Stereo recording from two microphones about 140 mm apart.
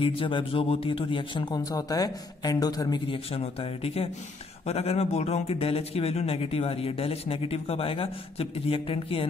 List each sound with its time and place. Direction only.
0.0 s speech: 40° left (ahead or behind)
3.1 s speech: 45° left (ahead or behind)